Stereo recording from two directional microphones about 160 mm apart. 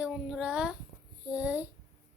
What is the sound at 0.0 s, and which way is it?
Child singing, 5° right (ahead or behind).